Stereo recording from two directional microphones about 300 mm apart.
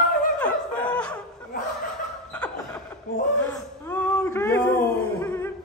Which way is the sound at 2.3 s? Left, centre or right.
Centre.